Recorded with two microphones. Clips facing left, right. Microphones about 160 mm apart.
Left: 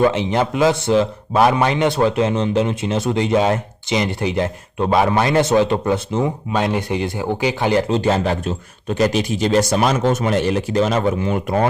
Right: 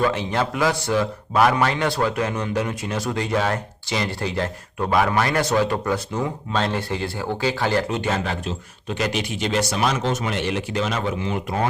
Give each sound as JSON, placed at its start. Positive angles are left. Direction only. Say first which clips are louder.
{"t": 0.0, "sound": "a man's voice", "louder": "left 5 dB", "side_deg": 20}
{"t": 7.9, "sound": "speech", "louder": "left 7 dB", "side_deg": 35}